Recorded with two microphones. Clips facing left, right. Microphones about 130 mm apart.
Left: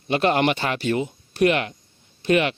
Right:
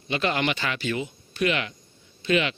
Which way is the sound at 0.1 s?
50° left (ahead or behind).